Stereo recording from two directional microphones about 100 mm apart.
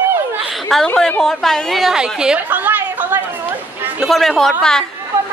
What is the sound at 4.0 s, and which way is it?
Speech, centre (ahead or behind).